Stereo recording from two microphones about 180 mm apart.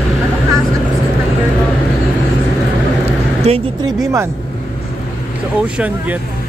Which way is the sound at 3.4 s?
35° right (ahead or behind).